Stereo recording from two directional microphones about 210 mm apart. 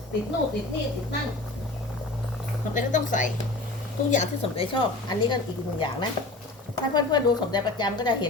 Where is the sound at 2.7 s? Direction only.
35° left (ahead or behind).